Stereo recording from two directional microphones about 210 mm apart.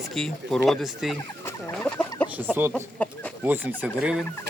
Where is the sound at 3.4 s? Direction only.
10° right (ahead or behind).